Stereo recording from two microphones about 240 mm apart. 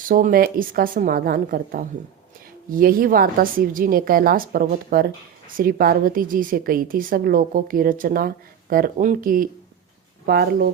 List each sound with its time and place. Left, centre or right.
0.0 s a woman's voice: right